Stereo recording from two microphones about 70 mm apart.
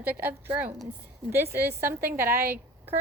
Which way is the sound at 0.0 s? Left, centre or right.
Right.